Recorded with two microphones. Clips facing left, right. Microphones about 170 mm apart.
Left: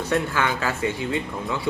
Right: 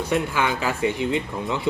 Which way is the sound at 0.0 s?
15° right (ahead or behind).